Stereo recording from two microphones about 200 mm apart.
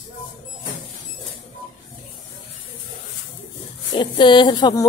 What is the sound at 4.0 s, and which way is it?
Speech, 25° left (ahead or behind).